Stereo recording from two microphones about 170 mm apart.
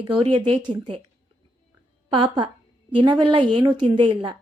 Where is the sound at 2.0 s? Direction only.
25° right (ahead or behind).